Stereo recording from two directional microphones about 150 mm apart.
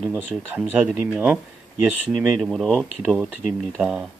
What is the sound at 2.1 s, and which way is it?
Speech, 5° left (ahead or behind).